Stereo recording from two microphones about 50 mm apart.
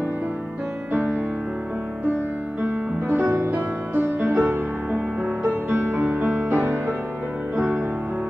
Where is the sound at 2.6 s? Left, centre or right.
Right.